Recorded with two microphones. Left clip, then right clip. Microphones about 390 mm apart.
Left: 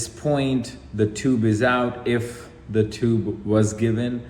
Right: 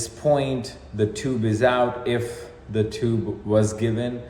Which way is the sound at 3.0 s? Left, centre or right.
Right.